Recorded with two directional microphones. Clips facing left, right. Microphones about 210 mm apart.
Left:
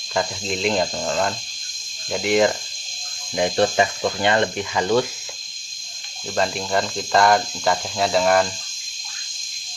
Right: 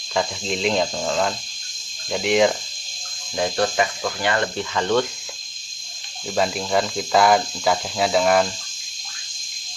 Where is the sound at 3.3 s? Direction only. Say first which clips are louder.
Left 3 dB; 20° left (ahead or behind).